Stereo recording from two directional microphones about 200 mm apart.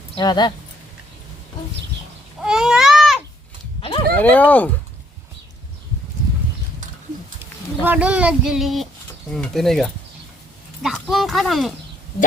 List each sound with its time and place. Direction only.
0.2 s speech: 20° left (ahead or behind)
2.4 s a sound: 5° right (ahead or behind)
3.8 s horse: 25° left (ahead or behind)
4.1 s speech: 5° left (ahead or behind)
7.9 s speech: 5° right (ahead or behind)